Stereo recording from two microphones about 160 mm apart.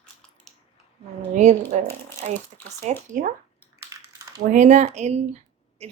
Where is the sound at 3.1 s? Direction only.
60° right (ahead or behind).